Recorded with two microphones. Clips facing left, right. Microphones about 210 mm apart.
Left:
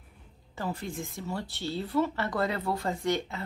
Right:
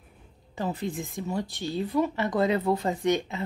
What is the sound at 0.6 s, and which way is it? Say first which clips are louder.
Speech: right 4 dB; 20° right (ahead or behind).